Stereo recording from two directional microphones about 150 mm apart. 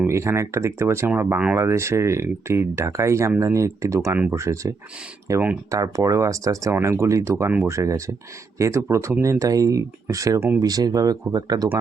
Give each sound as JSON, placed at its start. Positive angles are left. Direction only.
{"t": 0.0, "sound": "speech", "side_deg": -20}
{"t": 5.7, "sound": "speech", "side_deg": -20}